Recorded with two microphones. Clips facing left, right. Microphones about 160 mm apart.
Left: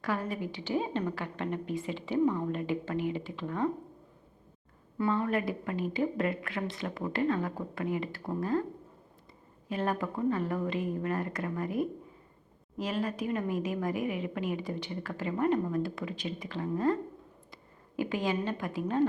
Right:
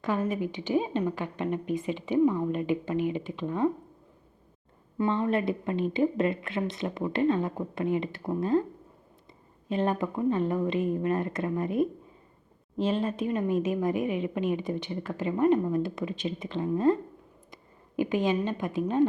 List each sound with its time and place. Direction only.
0.0 s a woman's voice: 20° right (ahead or behind)
4.9 s a woman's voice: 20° right (ahead or behind)
9.6 s a woman's voice: 20° right (ahead or behind)